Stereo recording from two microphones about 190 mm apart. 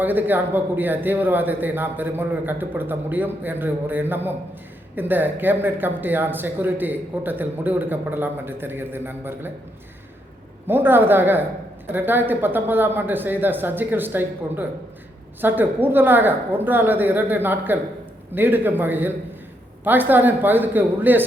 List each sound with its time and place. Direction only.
0.0 s speech: 10° right (ahead or behind)
10.7 s speech: 10° right (ahead or behind)